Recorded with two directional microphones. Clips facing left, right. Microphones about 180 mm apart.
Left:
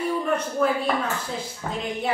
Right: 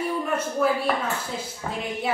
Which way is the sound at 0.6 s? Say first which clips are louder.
Even; 5° right (ahead or behind).